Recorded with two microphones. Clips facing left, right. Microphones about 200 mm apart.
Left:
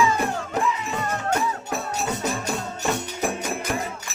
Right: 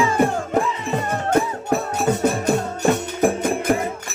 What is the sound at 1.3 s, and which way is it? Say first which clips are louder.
Music: right 9 dB; 55° right (ahead or behind).